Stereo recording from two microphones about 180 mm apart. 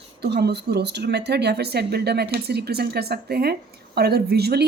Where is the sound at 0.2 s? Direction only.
65° right (ahead or behind).